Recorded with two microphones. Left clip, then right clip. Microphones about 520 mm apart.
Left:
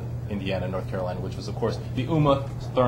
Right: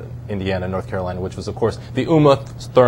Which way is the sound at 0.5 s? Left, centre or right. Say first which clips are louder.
Right 6 dB; right.